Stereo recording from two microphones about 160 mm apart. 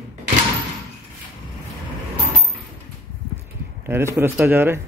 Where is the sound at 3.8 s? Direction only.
15° right (ahead or behind).